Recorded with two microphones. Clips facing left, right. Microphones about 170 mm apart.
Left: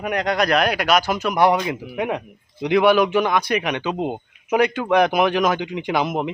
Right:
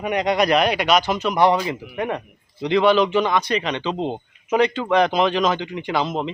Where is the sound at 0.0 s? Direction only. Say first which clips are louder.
Right 1 dB; centre (ahead or behind).